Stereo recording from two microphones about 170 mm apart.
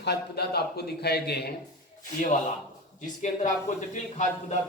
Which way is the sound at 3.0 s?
45° left (ahead or behind).